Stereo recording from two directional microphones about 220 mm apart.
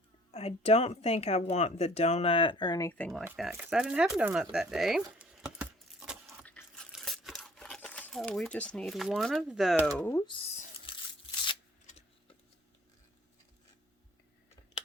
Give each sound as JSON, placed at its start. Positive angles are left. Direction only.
{"t": 0.3, "sound": "speech", "side_deg": 25}
{"t": 3.2, "sound": "speech", "side_deg": -5}
{"t": 6.4, "sound": "crumpling", "side_deg": 5}
{"t": 10.0, "sound": "speech", "side_deg": 10}
{"t": 10.3, "sound": "a sound", "side_deg": 25}